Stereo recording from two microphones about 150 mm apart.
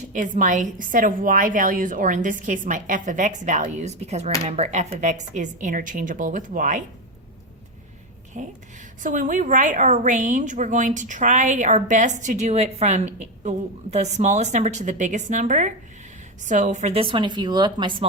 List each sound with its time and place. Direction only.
0.1 s a woman's voice: 60° right (ahead or behind)
8.4 s a woman's voice: 55° right (ahead or behind); by 18.0 s 30° right (ahead or behind)